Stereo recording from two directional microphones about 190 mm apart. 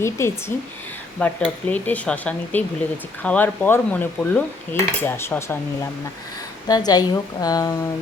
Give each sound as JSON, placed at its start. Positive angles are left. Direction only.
{"t": 0.0, "sound": "cutlery", "side_deg": 15}
{"t": 6.7, "sound": "a woman's voice", "side_deg": 20}